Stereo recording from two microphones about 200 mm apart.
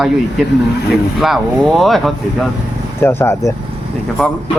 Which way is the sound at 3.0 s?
10° left (ahead or behind).